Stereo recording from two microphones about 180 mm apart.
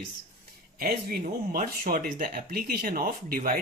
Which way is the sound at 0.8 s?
55° right (ahead or behind).